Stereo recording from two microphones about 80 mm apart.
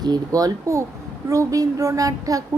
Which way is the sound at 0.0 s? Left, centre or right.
Right.